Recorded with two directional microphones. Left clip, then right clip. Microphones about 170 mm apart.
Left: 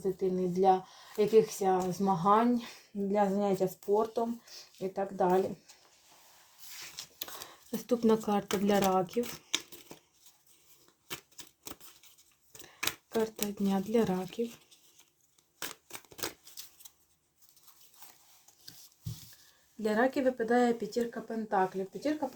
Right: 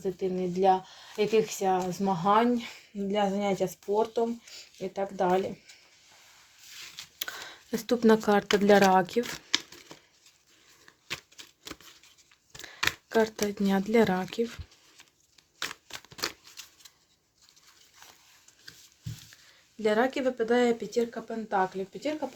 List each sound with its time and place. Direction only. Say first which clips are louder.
0.0 s speech: right 1 dB; 20° right (ahead or behind)
6.9 s a sound: right 10 dB; 25° right (ahead or behind)
8.6 s speech: right 8 dB; 40° right (ahead or behind)
13.1 s speech: right 7 dB; 40° right (ahead or behind)
19.8 s speech: right 3 dB; 25° right (ahead or behind)